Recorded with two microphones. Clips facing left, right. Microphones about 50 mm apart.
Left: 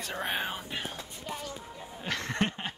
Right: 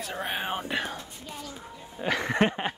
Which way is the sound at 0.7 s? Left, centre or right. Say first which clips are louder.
Right 9 dB; right.